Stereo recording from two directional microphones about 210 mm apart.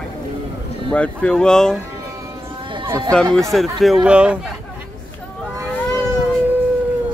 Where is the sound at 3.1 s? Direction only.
5° left (ahead or behind).